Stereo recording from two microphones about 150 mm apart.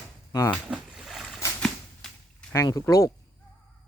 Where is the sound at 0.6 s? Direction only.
5° right (ahead or behind).